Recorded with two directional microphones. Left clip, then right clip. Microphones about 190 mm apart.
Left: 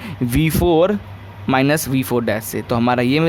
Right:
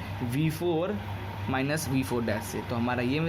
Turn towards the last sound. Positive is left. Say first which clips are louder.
# left 13 dB
turn(degrees=55)  # may be behind; listen again after turning